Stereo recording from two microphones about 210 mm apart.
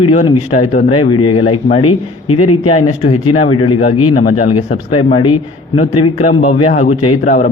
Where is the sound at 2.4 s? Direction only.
90° left.